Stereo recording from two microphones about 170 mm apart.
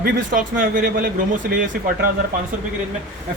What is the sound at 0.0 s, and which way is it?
Speech, 50° right (ahead or behind).